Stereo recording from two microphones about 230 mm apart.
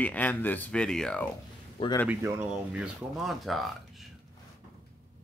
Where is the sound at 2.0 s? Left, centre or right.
Centre.